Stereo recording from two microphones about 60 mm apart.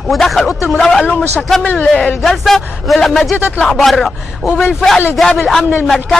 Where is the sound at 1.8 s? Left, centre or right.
Centre.